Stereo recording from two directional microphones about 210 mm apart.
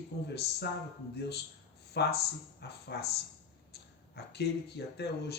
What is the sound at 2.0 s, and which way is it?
Speech, 50° left (ahead or behind).